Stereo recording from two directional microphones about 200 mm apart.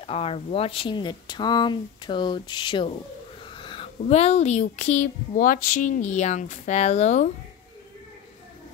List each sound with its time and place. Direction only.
0.0 s speech: 30° left (ahead or behind)